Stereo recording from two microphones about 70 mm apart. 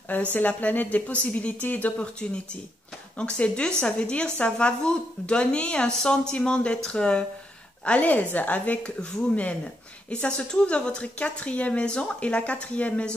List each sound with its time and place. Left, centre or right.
0.1 s a woman's voice: left